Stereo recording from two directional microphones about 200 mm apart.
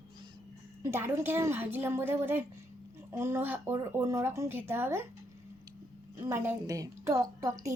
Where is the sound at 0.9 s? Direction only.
10° right (ahead or behind).